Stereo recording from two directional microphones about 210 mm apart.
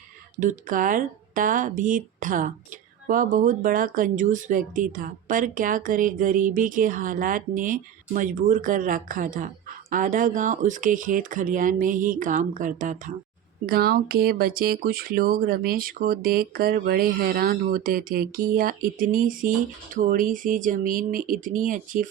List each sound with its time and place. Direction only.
0.3 s speech: 40° right (ahead or behind)